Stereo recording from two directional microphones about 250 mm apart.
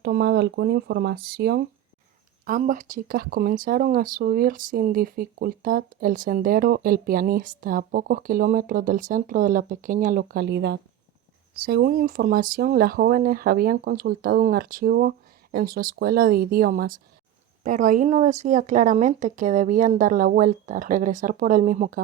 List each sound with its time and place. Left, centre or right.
0.0 s speech: right